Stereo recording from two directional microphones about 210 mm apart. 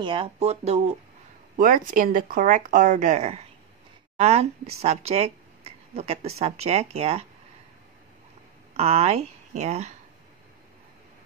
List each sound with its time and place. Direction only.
0.0 s speech: 25° right (ahead or behind)
8.7 s speech: 30° right (ahead or behind)